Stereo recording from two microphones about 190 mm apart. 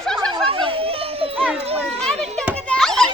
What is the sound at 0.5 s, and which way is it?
Children playing, 30° right (ahead or behind).